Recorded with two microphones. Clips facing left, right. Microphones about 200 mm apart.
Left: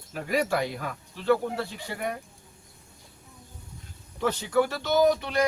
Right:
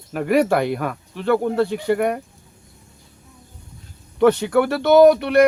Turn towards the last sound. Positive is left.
turn(degrees=-70)  # may be behind; listen again after turning